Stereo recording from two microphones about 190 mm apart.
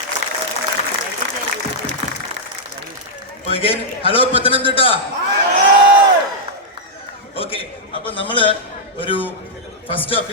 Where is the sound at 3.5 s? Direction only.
30° left (ahead or behind).